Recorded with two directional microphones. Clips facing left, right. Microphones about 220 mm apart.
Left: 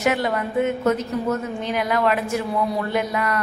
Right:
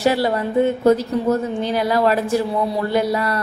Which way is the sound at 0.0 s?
35° right (ahead or behind).